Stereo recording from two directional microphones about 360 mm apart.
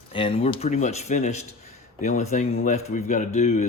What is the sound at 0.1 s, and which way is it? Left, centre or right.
Speech, centre.